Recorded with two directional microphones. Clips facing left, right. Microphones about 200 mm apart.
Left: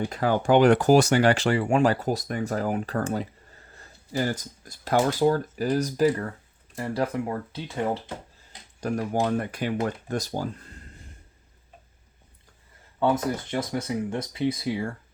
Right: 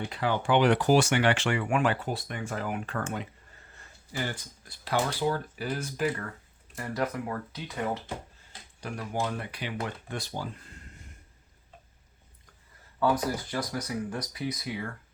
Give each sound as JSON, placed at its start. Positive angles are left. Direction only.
{"t": 0.0, "sound": "speech", "side_deg": 45}
{"t": 8.8, "sound": "speech", "side_deg": 40}
{"t": 13.0, "sound": "speech", "side_deg": 25}